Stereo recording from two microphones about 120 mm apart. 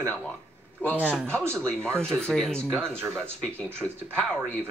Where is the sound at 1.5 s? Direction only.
5° left (ahead or behind).